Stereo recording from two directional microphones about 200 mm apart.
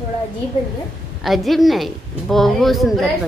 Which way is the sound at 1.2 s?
Centre (ahead or behind).